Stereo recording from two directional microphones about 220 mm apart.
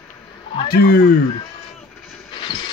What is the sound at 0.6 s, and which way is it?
Speech, 45° left (ahead or behind).